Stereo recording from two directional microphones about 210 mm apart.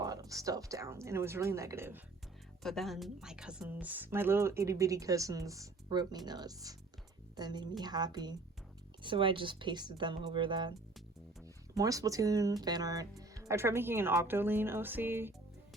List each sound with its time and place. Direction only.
0.0 s a woman's voice: 15° right (ahead or behind)
2.6 s a woman's voice: centre (ahead or behind); by 10.8 s 20° right (ahead or behind)
11.8 s a woman's voice: 15° right (ahead or behind)